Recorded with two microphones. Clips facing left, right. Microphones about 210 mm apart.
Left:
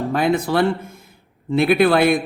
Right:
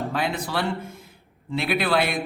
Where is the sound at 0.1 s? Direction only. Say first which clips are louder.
Left 8 dB; 50° left (ahead or behind).